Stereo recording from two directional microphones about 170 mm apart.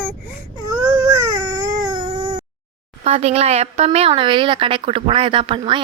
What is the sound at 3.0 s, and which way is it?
A woman's voice, 40° right (ahead or behind).